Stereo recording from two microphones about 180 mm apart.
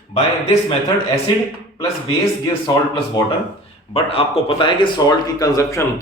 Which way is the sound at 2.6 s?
20° left (ahead or behind).